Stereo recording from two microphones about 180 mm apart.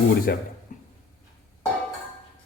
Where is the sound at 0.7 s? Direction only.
45° left (ahead or behind).